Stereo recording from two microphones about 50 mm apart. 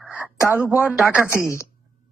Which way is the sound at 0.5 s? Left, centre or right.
Right.